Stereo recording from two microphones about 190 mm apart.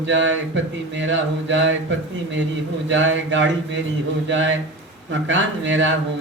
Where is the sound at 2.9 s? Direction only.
75° right (ahead or behind).